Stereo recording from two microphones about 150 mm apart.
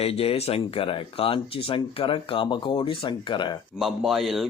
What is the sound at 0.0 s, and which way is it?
Speech, 40° left (ahead or behind).